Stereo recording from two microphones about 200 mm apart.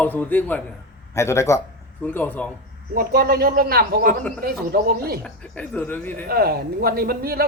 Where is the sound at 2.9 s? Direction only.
50° right (ahead or behind).